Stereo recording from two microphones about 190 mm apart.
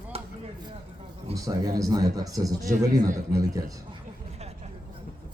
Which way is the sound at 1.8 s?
20° right (ahead or behind).